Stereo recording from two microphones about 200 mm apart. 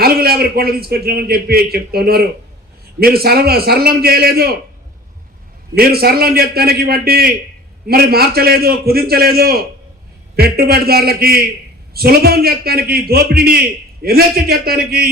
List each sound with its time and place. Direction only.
0.0 s a man's voice: 50° right (ahead or behind)
5.7 s a man's voice: 50° right (ahead or behind)